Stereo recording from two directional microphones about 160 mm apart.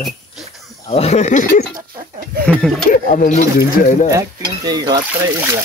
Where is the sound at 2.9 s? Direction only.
60° left (ahead or behind).